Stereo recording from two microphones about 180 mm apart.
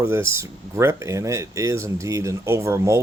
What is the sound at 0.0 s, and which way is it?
Speech, 15° right (ahead or behind).